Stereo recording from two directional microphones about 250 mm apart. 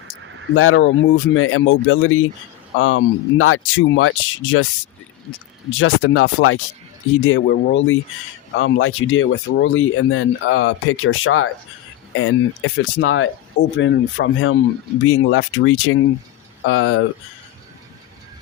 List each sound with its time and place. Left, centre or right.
0.5 s speech: left
5.7 s speech: left